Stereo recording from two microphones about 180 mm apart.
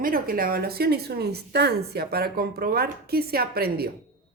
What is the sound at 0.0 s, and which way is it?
Speech, 55° right (ahead or behind).